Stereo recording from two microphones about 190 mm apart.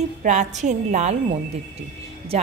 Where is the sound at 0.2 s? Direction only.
40° right (ahead or behind).